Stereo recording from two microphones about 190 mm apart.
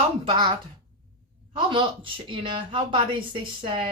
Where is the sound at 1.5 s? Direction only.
25° right (ahead or behind).